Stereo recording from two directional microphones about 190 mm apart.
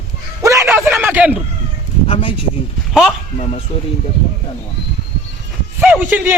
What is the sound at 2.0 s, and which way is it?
Speech, 30° left (ahead or behind).